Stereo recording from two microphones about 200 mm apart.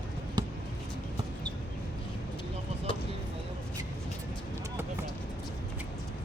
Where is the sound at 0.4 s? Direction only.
20° right (ahead or behind).